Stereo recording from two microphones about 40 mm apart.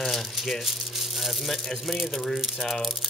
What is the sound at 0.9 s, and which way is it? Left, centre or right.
Speech, centre.